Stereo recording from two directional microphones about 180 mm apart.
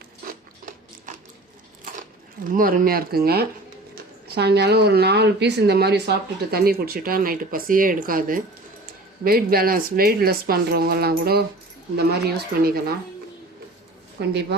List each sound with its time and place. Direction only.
1.8 s speech: 50° right (ahead or behind)
14.2 s a woman's voice: 70° right (ahead or behind)